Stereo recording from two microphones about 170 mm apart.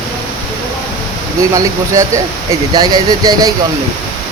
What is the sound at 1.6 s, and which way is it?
Speech, 20° right (ahead or behind).